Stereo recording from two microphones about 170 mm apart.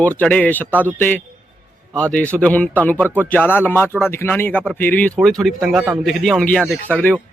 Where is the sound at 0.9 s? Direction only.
10° left (ahead or behind).